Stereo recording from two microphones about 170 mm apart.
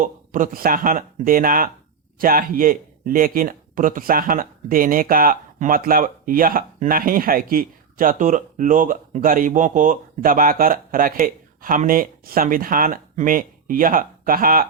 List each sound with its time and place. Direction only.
0.0 s speech: 50° right (ahead or behind)